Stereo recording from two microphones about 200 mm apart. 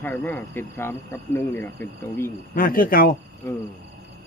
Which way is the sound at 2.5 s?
45° left (ahead or behind).